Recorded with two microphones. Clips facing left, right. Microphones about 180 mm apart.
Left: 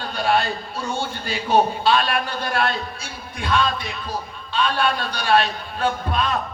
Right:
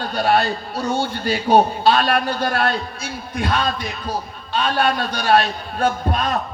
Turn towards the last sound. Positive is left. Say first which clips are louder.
# right 2 dB
turn(degrees=-40)  # may be behind; listen again after turning